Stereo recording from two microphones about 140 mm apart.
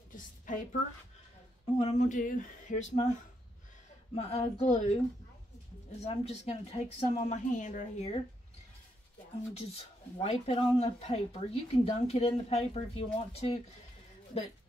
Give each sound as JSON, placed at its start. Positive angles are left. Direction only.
{"t": 0.1, "sound": "a sound", "side_deg": 70}
{"t": 1.8, "sound": "speech", "side_deg": 50}
{"t": 4.1, "sound": "speech", "side_deg": 45}
{"t": 6.0, "sound": "speech", "side_deg": 50}
{"t": 9.5, "sound": "speech", "side_deg": 45}